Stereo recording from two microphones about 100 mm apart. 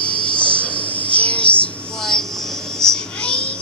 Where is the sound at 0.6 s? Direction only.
15° left (ahead or behind).